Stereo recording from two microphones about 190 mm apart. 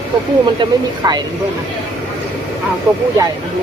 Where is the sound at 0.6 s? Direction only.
25° right (ahead or behind).